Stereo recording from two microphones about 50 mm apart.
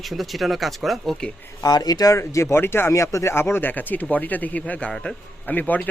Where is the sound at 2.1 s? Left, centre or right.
Left.